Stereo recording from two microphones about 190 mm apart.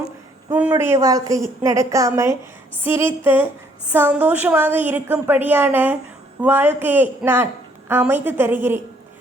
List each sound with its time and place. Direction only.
0.5 s a woman's voice: 10° right (ahead or behind)